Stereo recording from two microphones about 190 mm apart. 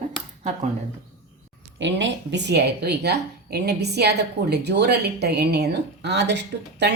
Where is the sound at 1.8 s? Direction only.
70° right (ahead or behind).